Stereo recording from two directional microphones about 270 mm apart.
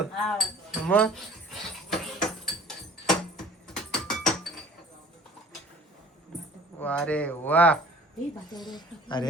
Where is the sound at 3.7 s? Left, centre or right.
Centre.